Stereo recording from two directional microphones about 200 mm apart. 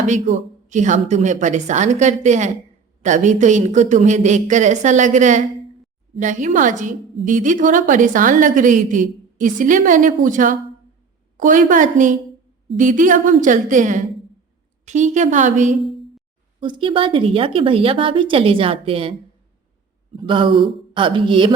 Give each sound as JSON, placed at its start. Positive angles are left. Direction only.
{"t": 0.0, "sound": "a woman's voice", "side_deg": -35}
{"t": 16.6, "sound": "a woman's voice", "side_deg": -25}
{"t": 20.1, "sound": "a woman's voice", "side_deg": -25}